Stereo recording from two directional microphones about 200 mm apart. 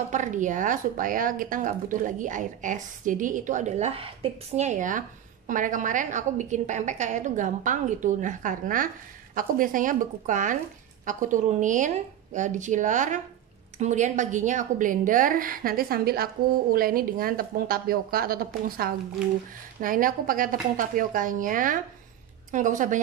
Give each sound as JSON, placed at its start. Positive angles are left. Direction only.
{"t": 0.1, "sound": "a woman's voice", "side_deg": -40}